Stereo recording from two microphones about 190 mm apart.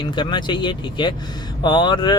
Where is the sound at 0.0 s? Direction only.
25° left (ahead or behind).